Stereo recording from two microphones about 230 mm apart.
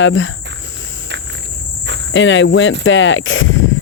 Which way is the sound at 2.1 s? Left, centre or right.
Left.